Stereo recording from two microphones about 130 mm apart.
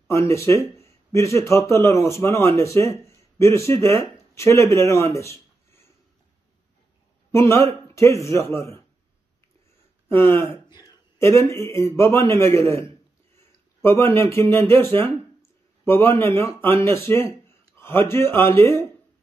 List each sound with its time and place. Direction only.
0.1 s speech: 20° left (ahead or behind)
5.1 s a sound: 20° left (ahead or behind)
7.3 s speech: 20° left (ahead or behind)
10.0 s a man's voice: 20° left (ahead or behind)